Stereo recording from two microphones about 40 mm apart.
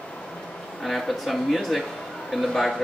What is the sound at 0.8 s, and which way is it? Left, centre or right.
A man's voice, centre.